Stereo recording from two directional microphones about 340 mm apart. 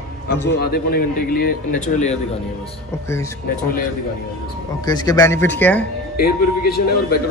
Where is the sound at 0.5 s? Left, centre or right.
Left.